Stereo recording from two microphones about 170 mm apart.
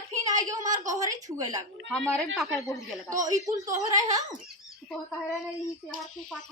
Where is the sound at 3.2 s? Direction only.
20° right (ahead or behind).